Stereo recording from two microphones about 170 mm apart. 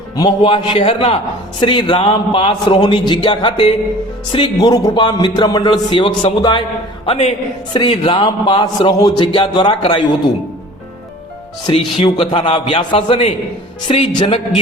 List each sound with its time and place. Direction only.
0.4 s a man's voice: 30° left (ahead or behind)
11.9 s a man's voice: 30° left (ahead or behind)